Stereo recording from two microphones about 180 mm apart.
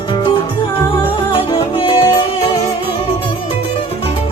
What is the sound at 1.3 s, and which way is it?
Music, 30° left (ahead or behind).